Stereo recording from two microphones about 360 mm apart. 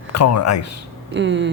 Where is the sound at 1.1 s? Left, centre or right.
Right.